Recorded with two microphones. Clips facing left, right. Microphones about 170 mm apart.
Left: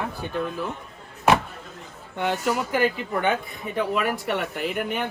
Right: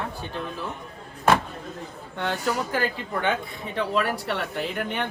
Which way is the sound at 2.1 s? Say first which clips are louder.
Left 2 dB; 10° left (ahead or behind).